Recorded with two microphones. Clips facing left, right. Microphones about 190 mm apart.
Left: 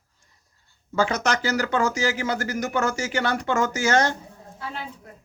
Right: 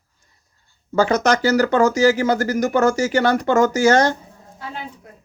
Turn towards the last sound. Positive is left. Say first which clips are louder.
# right 7 dB
turn(degrees=-35)  # may be behind; listen again after turning